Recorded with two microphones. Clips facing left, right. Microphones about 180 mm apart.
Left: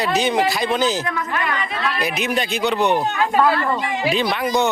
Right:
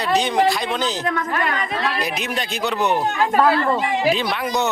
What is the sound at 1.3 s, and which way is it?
Speech, 40° right (ahead or behind).